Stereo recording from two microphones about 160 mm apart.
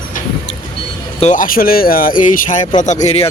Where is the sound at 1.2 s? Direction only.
55° left (ahead or behind).